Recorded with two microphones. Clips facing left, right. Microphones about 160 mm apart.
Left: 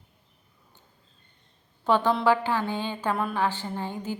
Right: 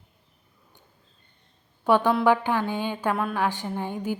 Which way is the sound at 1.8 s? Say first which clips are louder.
Right 2 dB; 10° right (ahead or behind).